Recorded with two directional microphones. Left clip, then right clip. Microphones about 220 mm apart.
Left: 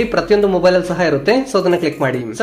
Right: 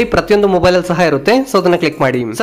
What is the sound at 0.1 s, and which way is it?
A man's voice, 25° right (ahead or behind).